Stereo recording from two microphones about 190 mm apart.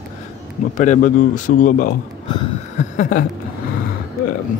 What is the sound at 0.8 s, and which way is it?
Speech, 40° left (ahead or behind).